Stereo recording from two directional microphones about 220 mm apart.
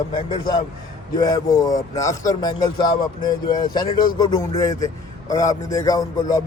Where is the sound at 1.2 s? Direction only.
15° left (ahead or behind).